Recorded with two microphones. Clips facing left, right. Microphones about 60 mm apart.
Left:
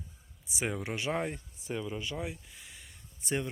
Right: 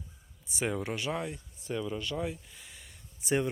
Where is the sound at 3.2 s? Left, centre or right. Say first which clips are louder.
Right 5 dB; centre.